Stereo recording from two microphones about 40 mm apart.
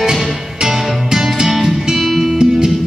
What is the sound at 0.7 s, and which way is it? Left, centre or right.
Music, centre.